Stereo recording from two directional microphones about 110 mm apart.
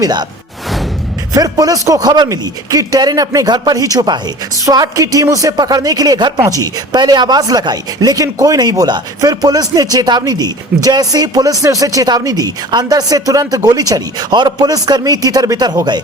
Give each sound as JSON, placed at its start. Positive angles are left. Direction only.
{"t": 0.0, "sound": "speech", "side_deg": -40}
{"t": 1.3, "sound": "speech", "side_deg": -35}